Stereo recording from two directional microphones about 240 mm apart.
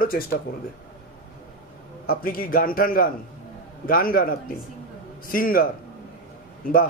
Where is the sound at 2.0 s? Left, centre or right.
Left.